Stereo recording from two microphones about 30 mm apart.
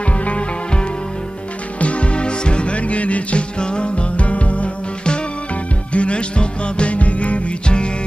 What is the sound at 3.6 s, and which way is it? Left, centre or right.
Music, left.